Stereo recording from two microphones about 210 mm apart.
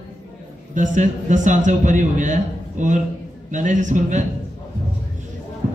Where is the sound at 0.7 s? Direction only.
35° right (ahead or behind).